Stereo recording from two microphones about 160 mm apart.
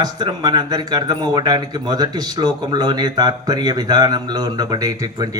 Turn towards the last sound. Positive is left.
turn(degrees=-25)  # may be behind; listen again after turning